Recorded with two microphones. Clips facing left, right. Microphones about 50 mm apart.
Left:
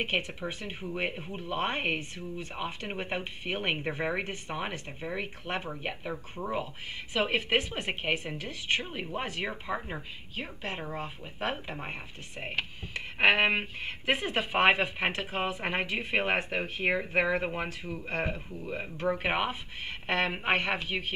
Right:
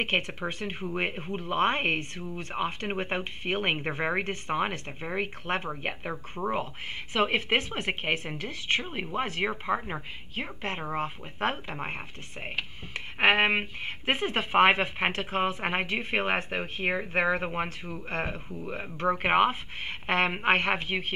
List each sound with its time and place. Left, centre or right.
0.0 s speech: right
0.8 s speech: right
2.9 s speech: right
4.2 s speech: right
8.8 s speech: right
13.2 s speech: right